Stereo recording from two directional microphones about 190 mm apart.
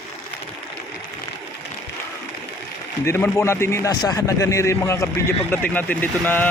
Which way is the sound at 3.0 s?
15° left (ahead or behind).